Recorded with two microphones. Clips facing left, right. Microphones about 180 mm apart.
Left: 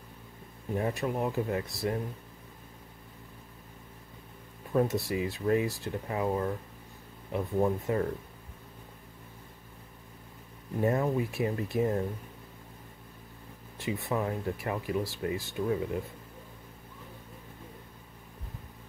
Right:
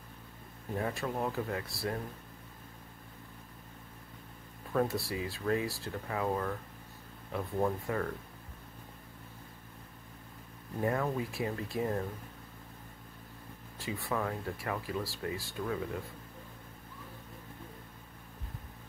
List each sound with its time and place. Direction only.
0.7 s speech: 20° left (ahead or behind)
4.7 s speech: 20° left (ahead or behind)
10.8 s speech: 25° left (ahead or behind)
13.7 s speech: 20° left (ahead or behind)